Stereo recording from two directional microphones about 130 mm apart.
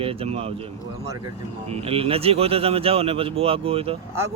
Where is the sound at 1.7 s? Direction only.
50° right (ahead or behind).